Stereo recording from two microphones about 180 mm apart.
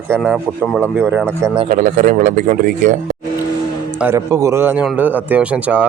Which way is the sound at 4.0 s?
15° right (ahead or behind).